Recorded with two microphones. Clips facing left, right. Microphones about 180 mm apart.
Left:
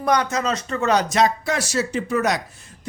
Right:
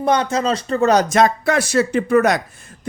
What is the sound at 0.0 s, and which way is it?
Speech, 25° right (ahead or behind).